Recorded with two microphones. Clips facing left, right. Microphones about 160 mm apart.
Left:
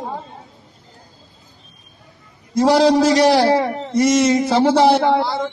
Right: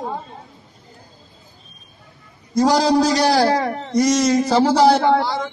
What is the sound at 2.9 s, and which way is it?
A man's voice, centre (ahead or behind).